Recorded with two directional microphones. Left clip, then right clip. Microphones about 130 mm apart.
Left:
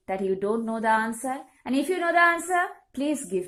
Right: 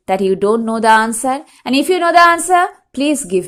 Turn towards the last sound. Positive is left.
turn(degrees=-25)  # may be behind; listen again after turning